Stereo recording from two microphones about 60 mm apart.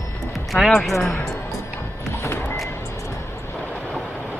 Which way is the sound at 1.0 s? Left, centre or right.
Left.